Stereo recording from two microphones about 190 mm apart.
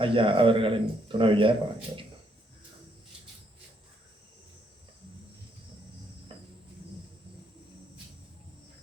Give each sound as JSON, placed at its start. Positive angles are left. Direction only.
{"t": 0.0, "sound": "speech", "side_deg": -25}